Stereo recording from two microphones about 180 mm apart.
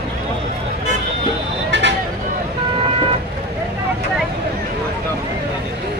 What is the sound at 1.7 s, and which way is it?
Vehicle, 80° right.